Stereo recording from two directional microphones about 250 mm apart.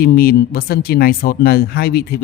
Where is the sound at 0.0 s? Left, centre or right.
Left.